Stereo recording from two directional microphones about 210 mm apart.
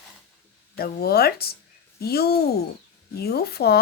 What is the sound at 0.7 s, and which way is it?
A woman's voice, 45° left (ahead or behind).